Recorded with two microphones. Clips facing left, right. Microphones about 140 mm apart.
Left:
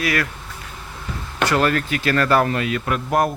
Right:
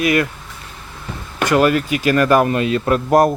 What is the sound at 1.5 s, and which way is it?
Speech, 10° right (ahead or behind).